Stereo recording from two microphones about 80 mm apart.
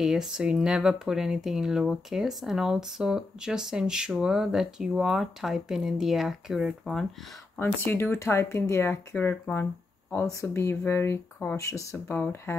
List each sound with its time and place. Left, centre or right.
0.0 s speech: centre
7.5 s speech: left
9.2 s speech: left